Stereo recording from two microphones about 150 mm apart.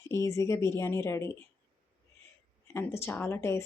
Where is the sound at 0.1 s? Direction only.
20° left (ahead or behind).